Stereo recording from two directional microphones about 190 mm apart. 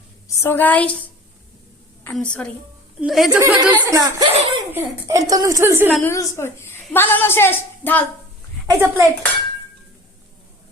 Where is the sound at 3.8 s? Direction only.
15° right (ahead or behind).